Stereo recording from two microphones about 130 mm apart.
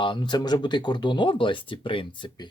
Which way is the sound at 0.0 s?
35° left (ahead or behind).